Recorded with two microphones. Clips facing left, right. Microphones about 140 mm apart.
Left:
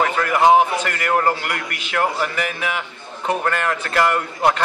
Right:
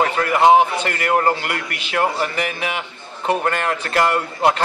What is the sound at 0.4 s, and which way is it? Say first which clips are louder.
A man's voice: right 1 dB; 30° right (ahead or behind).